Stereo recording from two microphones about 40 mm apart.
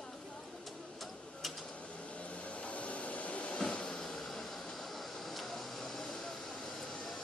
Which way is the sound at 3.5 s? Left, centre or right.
Left.